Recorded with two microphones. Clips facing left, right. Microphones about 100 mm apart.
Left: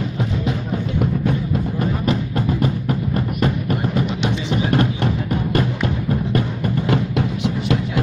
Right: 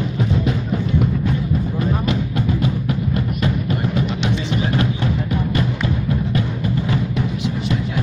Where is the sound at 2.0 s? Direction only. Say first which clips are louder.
Left 1 dB; 40° left (ahead or behind).